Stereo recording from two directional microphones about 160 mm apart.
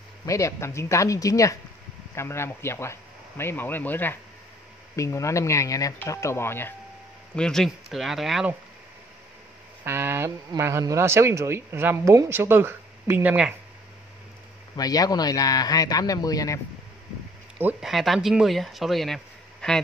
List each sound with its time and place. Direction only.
0.2 s speech: 20° left (ahead or behind)
7.3 s speech: 5° left (ahead or behind)
9.8 s speech: 15° right (ahead or behind)
14.8 s speech: 25° left (ahead or behind)
17.6 s speech: 5° right (ahead or behind)